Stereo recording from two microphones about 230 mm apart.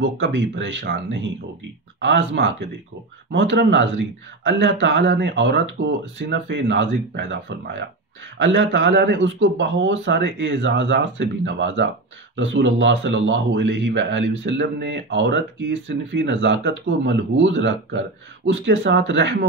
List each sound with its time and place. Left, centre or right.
0.0 s speech: right